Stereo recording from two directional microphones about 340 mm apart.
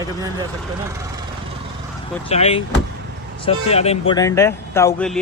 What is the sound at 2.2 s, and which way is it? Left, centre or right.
Speech, centre.